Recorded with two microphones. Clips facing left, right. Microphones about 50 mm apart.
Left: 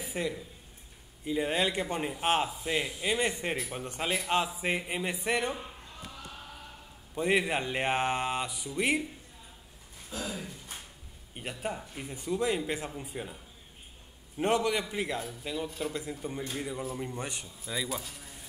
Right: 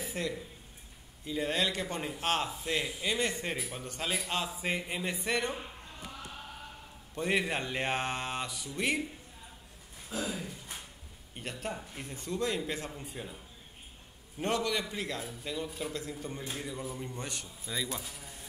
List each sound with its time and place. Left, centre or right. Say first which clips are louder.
0.0 s a sound: left 2 dB; centre
1.2 s a man's voice: left 3 dB; centre
7.2 s speech: left 3 dB; centre
10.2 s speech: even; centre
11.3 s a man's voice: left 2 dB; centre
14.4 s a man's voice: left 4 dB; centre
17.7 s a man's voice: left 2 dB; centre